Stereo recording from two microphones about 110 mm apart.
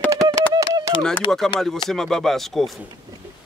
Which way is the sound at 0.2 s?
35° right (ahead or behind).